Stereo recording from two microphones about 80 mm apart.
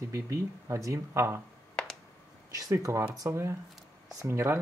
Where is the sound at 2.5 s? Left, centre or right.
Right.